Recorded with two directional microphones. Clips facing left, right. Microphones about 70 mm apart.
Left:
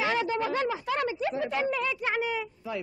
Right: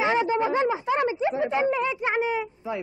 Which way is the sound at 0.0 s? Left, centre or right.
Right.